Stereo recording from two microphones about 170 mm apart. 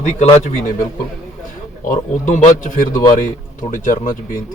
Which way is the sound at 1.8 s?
50° left (ahead or behind).